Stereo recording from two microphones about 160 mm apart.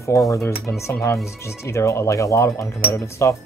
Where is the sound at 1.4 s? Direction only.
15° left (ahead or behind).